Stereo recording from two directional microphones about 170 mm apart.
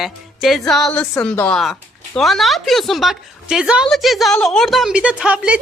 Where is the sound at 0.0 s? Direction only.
Centre (ahead or behind).